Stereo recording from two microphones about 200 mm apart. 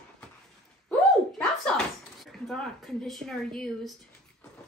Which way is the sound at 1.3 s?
5° left (ahead or behind).